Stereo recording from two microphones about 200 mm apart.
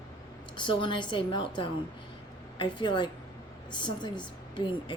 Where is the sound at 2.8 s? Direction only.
25° left (ahead or behind).